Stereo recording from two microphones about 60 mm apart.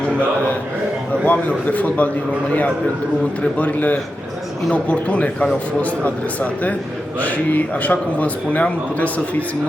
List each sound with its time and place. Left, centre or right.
1.2 s a man's voice: left
3.6 s a man's voice: left